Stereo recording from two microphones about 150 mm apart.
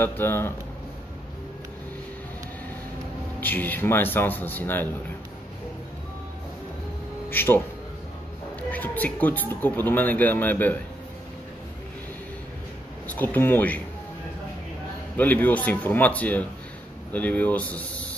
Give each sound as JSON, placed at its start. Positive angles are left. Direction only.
{"t": 0.0, "sound": "a man's voice", "side_deg": 15}
{"t": 3.3, "sound": "a man's voice", "side_deg": 10}
{"t": 7.2, "sound": "a man's voice", "side_deg": 15}
{"t": 8.6, "sound": "a man's voice", "side_deg": 10}
{"t": 13.0, "sound": "speech", "side_deg": 10}
{"t": 15.1, "sound": "a man's voice", "side_deg": 10}